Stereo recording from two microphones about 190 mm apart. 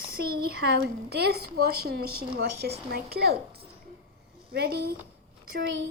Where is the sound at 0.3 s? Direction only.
55° right (ahead or behind).